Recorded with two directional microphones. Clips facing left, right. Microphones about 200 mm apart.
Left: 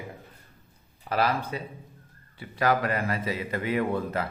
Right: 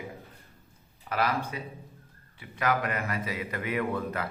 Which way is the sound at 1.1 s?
30° left (ahead or behind).